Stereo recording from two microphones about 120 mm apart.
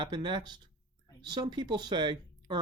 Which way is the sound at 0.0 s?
40° right (ahead or behind).